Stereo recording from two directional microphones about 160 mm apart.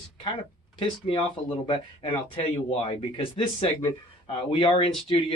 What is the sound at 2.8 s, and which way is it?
Speech, 35° left (ahead or behind).